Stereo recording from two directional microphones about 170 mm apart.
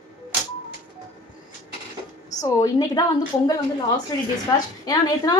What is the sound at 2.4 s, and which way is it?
Speech, 20° left (ahead or behind).